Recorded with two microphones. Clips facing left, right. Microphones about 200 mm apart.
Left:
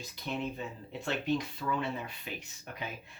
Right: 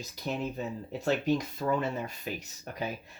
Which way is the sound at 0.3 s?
40° right (ahead or behind).